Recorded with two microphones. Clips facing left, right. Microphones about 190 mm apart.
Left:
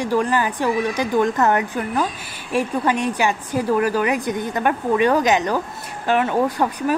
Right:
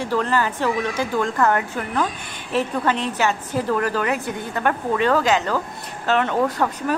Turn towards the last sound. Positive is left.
turn(degrees=10)  # may be behind; listen again after turning